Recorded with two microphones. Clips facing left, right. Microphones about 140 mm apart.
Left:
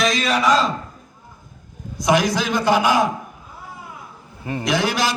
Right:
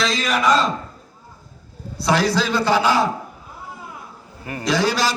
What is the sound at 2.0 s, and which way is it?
A man's voice, 15° left (ahead or behind).